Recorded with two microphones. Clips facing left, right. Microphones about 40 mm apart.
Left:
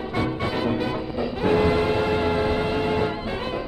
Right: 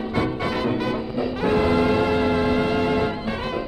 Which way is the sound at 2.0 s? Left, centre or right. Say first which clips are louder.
Right 2 dB; centre.